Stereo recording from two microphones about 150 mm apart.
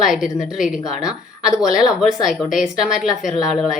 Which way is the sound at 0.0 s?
5° right (ahead or behind).